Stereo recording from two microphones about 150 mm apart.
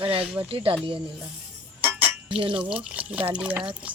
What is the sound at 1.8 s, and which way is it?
Chink, 10° right (ahead or behind).